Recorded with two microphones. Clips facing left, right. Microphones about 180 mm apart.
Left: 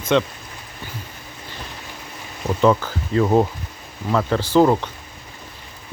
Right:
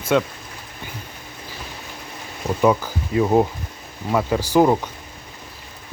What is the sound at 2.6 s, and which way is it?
Speech, 10° right (ahead or behind).